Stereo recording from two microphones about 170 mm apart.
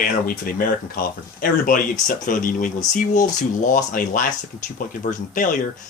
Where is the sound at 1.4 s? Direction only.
55° left (ahead or behind).